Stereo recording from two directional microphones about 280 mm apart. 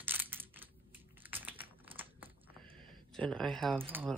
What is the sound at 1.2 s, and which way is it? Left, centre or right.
Typing, centre.